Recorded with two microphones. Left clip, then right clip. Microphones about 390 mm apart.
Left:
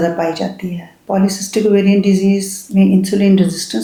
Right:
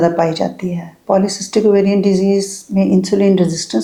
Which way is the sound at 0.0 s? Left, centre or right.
Right.